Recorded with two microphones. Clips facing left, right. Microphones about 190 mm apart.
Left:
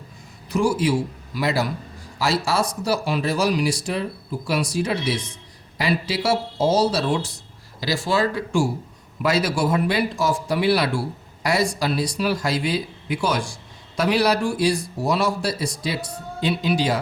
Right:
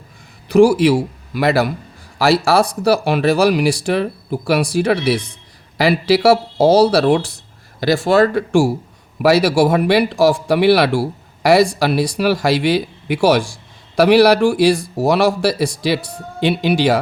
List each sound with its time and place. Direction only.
0.4 s a man's voice: 80° right
11.8 s speech: 65° right (ahead or behind)